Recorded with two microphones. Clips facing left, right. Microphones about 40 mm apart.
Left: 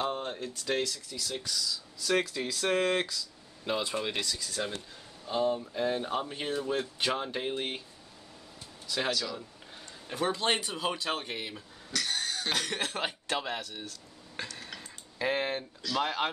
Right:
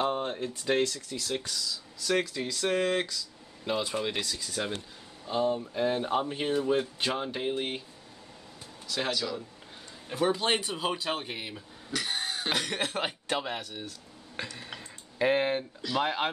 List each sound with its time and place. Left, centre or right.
0.0 s speech: centre
0.8 s speech: right
1.5 s speech: centre
4.4 s speech: right
5.2 s speech: centre
8.8 s speech: centre
11.9 s speech: centre
15.2 s speech: centre